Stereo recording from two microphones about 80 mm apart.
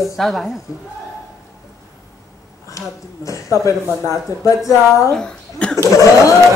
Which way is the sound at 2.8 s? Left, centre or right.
Left.